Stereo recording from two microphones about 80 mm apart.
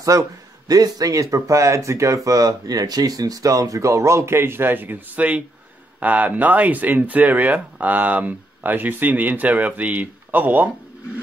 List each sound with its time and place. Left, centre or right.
0.0 s speech: right